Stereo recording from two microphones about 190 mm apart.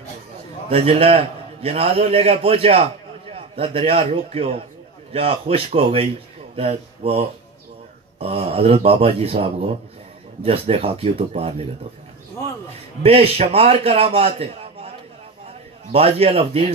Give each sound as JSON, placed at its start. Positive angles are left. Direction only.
{"t": 0.7, "sound": "a man's voice", "side_deg": -30}
{"t": 13.0, "sound": "a man's voice", "side_deg": -30}
{"t": 15.9, "sound": "a man's voice", "side_deg": -30}